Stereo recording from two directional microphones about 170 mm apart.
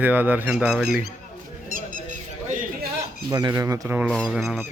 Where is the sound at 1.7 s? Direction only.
55° right (ahead or behind).